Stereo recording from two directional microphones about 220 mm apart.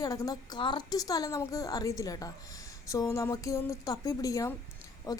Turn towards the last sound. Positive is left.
turn(degrees=15)  # may be behind; listen again after turning